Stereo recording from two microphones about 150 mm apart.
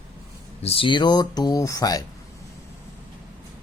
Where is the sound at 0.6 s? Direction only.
40° left (ahead or behind).